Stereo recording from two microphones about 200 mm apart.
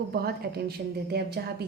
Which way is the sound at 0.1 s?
50° right (ahead or behind).